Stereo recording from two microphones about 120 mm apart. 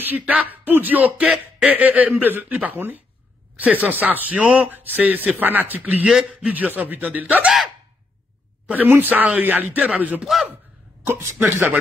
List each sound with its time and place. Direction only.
0.0 s speech: 15° right (ahead or behind)
8.6 s speech: 15° right (ahead or behind)
11.1 s speech: 20° right (ahead or behind)